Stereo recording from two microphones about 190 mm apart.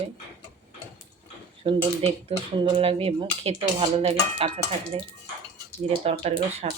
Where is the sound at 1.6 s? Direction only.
30° right (ahead or behind).